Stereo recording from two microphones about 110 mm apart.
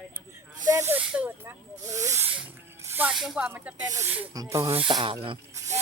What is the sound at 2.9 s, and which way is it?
Snake, 15° right (ahead or behind).